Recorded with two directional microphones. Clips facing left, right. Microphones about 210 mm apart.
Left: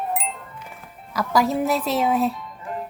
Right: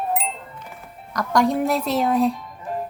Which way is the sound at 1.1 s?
5° left (ahead or behind).